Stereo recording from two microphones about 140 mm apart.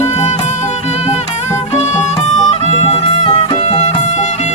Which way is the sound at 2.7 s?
50° left (ahead or behind).